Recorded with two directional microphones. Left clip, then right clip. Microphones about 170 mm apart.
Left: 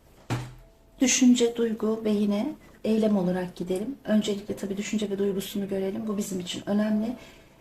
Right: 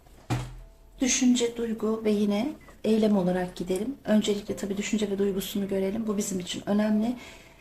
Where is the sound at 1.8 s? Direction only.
5° left (ahead or behind).